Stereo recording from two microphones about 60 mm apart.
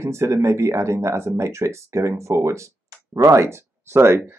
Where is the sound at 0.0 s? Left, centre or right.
Right.